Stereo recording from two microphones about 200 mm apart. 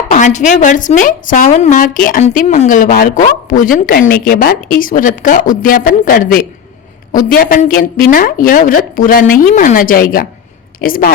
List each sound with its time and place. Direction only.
0.1 s a woman's voice: 40° left (ahead or behind)